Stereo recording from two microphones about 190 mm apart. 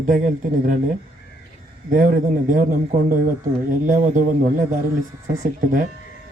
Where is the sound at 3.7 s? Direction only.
40° right (ahead or behind).